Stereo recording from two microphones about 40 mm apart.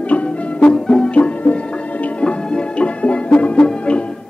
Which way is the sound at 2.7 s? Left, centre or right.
Left.